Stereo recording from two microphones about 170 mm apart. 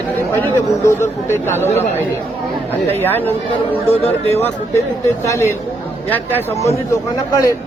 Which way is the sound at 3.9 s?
40° left (ahead or behind).